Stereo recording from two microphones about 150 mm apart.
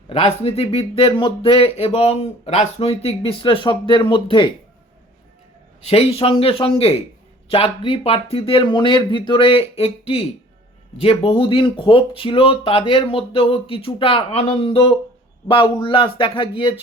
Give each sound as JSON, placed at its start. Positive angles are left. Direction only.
{"t": 0.1, "sound": "speech", "side_deg": 45}
{"t": 5.8, "sound": "speech", "side_deg": 40}
{"t": 11.0, "sound": "speech", "side_deg": 40}